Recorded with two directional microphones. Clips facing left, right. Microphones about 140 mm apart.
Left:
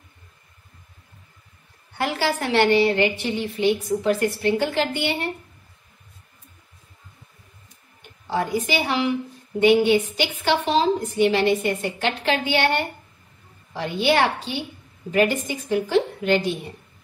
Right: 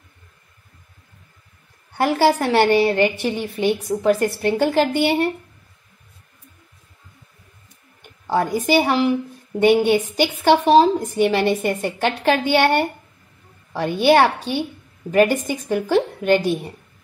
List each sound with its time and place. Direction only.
2.0 s a woman's voice: 40° right (ahead or behind)
8.3 s a woman's voice: 40° right (ahead or behind)